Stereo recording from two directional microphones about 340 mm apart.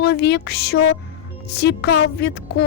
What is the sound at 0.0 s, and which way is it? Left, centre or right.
Speech, left.